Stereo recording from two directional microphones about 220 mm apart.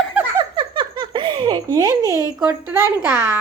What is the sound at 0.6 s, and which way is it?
Giggle, 20° right (ahead or behind).